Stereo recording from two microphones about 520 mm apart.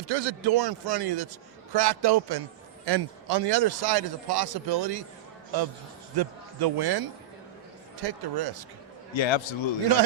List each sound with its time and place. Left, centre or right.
0.1 s speech: right
6.1 s speech: right
9.1 s a man's voice: left